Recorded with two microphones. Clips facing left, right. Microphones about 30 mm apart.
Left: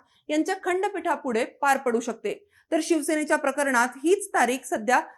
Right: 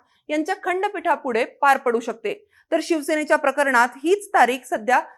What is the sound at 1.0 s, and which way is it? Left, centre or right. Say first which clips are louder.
A woman's voice: right 4 dB; right.